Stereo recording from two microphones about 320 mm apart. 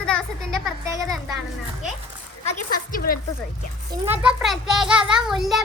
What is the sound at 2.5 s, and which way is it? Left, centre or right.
Speech, left.